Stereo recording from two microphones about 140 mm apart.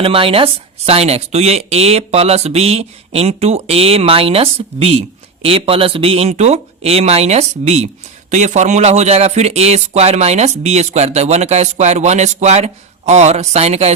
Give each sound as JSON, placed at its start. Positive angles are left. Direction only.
{"t": 0.0, "sound": "speech", "side_deg": -40}